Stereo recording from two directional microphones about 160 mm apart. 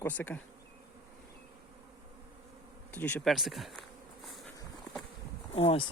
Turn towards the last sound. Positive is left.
turn(degrees=40)  # may be behind; listen again after turning